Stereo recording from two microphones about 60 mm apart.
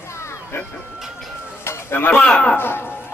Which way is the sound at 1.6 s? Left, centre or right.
Left.